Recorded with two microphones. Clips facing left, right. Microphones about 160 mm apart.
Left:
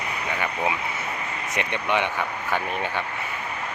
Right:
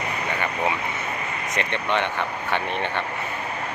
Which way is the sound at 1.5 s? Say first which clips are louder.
Even; 10° left (ahead or behind).